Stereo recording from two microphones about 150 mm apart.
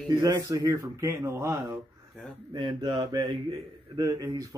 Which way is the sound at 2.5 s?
30° right (ahead or behind).